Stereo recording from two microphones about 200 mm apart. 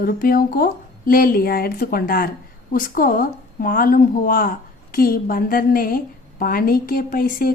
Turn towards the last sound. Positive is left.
turn(degrees=45)  # may be behind; listen again after turning